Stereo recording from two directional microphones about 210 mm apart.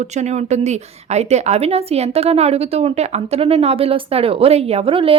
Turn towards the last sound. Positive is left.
turn(degrees=-25)  # may be behind; listen again after turning